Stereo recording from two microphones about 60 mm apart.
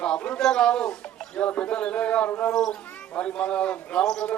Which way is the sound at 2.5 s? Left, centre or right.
Centre.